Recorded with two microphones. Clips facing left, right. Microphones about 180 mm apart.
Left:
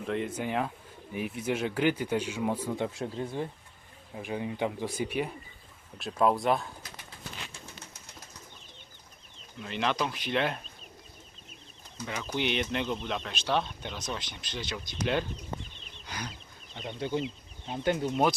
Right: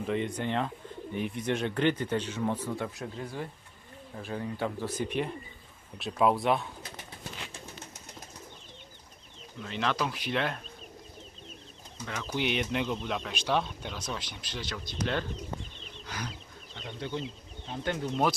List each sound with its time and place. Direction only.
0.0 s speech: centre (ahead or behind)
2.7 s speech: 25° left (ahead or behind); by 6.7 s centre (ahead or behind)
9.6 s speech: 5° left (ahead or behind)
12.0 s speech: 10° left (ahead or behind)
12.3 s speech: 5° right (ahead or behind)
14.7 s speech: 15° left (ahead or behind)
16.0 s chicken: centre (ahead or behind)
16.7 s speech: 10° left (ahead or behind)